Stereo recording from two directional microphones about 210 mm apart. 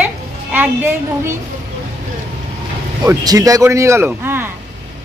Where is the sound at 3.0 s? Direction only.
15° right (ahead or behind).